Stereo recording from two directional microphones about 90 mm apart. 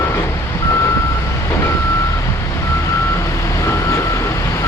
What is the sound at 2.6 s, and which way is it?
Reversing beeps, 30° left (ahead or behind).